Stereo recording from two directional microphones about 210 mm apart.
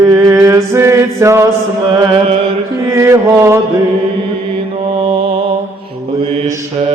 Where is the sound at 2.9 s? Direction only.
15° right (ahead or behind).